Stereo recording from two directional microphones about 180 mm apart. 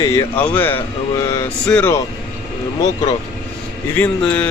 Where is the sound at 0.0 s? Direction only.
20° left (ahead or behind).